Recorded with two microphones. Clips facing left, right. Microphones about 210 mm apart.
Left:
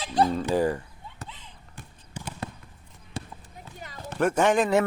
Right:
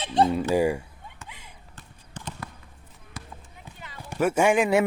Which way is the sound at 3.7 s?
40° left (ahead or behind).